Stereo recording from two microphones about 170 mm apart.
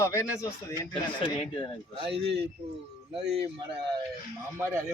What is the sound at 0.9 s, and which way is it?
Speech, 30° left (ahead or behind).